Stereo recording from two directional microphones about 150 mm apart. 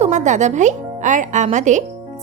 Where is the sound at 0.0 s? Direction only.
50° right (ahead or behind).